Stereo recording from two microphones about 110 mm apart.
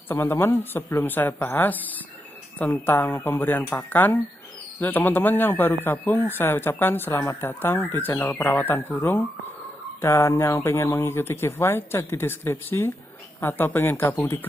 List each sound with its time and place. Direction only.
0.1 s speech: 20° left (ahead or behind)